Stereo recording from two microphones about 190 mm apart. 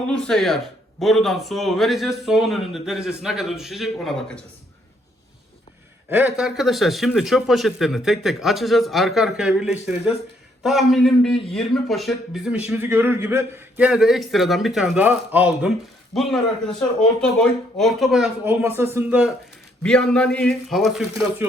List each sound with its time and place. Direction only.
0.0 s speech: 5° left (ahead or behind)
6.1 s a man's voice: 10° right (ahead or behind)
19.8 s speech: 5° left (ahead or behind)